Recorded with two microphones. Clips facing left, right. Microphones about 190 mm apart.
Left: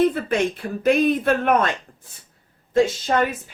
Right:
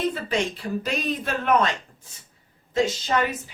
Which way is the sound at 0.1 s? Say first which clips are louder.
Left 4 dB; 55° left (ahead or behind).